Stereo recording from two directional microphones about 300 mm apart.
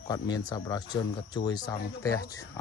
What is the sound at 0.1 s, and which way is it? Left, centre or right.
Speech, centre.